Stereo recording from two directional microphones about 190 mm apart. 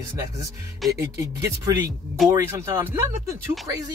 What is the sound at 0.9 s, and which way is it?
Speech, 15° right (ahead or behind).